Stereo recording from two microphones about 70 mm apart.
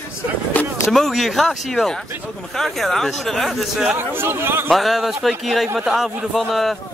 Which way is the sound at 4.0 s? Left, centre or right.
Right.